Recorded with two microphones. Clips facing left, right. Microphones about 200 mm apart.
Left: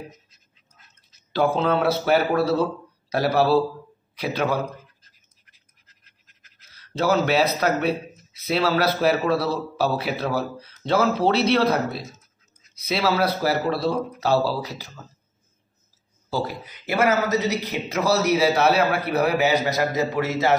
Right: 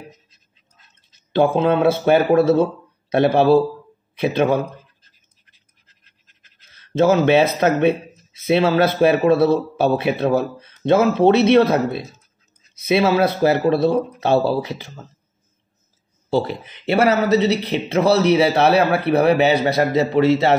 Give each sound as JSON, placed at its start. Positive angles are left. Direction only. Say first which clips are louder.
{"t": 1.3, "sound": "speech", "louder": "right 5 dB", "side_deg": -25}
{"t": 5.0, "sound": "scratch", "louder": "right 1 dB", "side_deg": -25}
{"t": 7.6, "sound": "speech", "louder": "right 6 dB", "side_deg": -25}
{"t": 16.3, "sound": "a man's voice", "louder": "right 7 dB", "side_deg": -25}